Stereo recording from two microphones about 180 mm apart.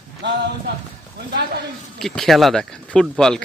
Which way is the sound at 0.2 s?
75° right (ahead or behind).